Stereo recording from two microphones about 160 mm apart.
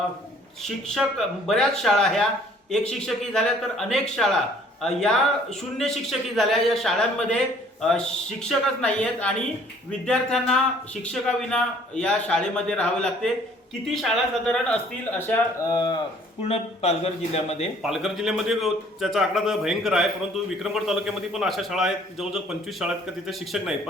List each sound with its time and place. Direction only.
0.6 s a man's voice: centre (ahead or behind)
15.7 s speech: 25° left (ahead or behind)
16.4 s speech: 40° left (ahead or behind)
17.8 s a man's voice: centre (ahead or behind)